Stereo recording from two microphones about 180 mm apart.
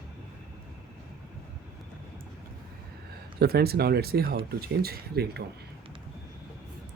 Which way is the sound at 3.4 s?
60° right (ahead or behind).